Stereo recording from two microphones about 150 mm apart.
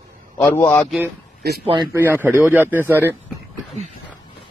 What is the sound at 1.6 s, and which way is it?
Speech, 30° right (ahead or behind).